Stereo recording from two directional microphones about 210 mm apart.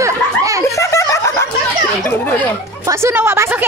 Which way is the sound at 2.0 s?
10° left (ahead or behind).